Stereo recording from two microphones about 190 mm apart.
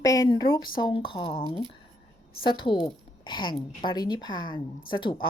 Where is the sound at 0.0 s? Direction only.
20° left (ahead or behind).